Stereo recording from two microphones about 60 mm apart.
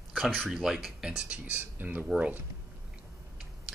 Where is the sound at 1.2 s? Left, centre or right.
Right.